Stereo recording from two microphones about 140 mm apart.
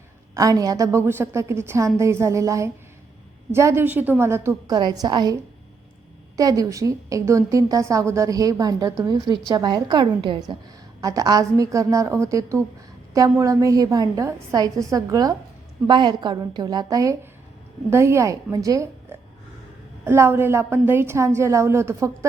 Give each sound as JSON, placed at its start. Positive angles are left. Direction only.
{"t": 0.3, "sound": "a woman's voice", "side_deg": -25}
{"t": 4.7, "sound": "a woman's voice", "side_deg": -30}
{"t": 20.1, "sound": "a woman's voice", "side_deg": -15}